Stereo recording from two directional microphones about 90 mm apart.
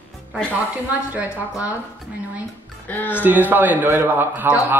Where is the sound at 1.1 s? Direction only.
20° right (ahead or behind).